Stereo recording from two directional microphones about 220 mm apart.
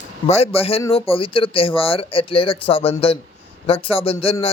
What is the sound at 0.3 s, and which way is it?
Speech, 30° left (ahead or behind).